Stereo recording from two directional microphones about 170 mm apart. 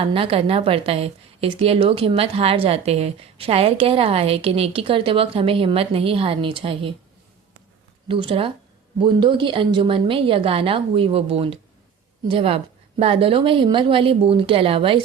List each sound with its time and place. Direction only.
0.0 s a woman's voice: 30° right (ahead or behind)
8.0 s a woman's voice: 30° right (ahead or behind)